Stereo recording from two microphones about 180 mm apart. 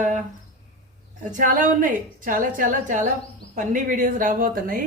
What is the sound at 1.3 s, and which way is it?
A woman's voice, 50° right (ahead or behind).